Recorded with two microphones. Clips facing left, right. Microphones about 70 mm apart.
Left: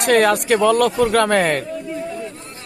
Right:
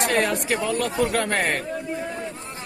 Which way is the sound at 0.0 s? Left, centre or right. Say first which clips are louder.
Left 7 dB; left.